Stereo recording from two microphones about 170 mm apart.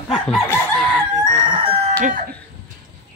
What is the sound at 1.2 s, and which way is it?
Speech, 25° right (ahead or behind).